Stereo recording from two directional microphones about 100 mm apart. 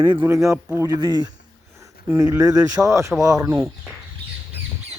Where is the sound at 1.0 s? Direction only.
45° right (ahead or behind).